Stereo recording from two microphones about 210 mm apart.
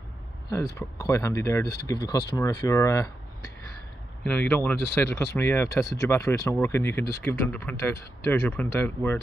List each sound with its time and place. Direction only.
0.7 s speech: 15° left (ahead or behind)
4.2 s speech: 5° left (ahead or behind)